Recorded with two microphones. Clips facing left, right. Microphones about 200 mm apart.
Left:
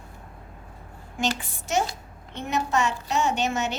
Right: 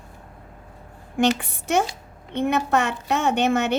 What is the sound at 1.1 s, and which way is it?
A child's voice, 60° right (ahead or behind).